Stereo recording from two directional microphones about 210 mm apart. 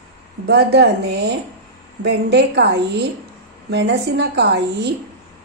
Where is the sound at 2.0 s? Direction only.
55° right (ahead or behind).